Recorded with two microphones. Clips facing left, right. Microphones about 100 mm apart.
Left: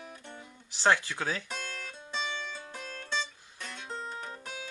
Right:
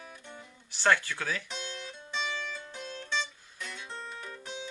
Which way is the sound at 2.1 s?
35° left (ahead or behind).